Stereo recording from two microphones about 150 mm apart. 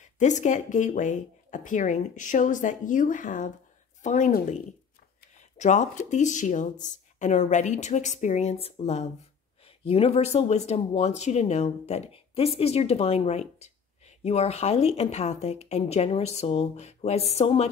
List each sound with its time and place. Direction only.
0.0 s speech: 55° left (ahead or behind)
5.6 s speech: 55° left (ahead or behind)